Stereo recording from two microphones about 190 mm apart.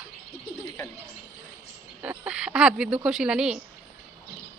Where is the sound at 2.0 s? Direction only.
5° right (ahead or behind).